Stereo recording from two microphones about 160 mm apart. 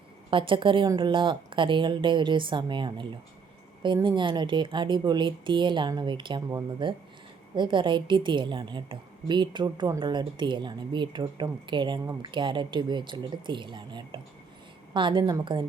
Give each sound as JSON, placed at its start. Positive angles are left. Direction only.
{"t": 0.3, "sound": "a woman's voice", "side_deg": -30}